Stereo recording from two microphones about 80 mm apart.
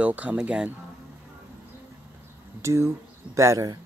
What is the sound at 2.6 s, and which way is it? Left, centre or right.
Speech, right.